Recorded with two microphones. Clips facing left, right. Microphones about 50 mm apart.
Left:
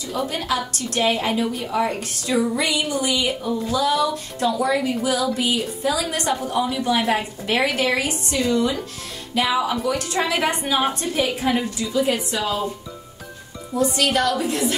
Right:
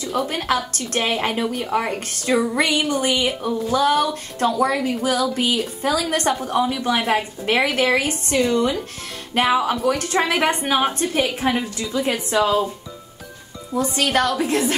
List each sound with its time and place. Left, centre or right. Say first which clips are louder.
0.3 s speech: right 2 dB; right
6.6 s speech: left 1 dB; right
13.7 s speech: even; right